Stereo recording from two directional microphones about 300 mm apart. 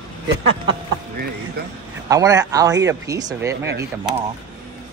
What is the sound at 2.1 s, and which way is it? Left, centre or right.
Speech, centre.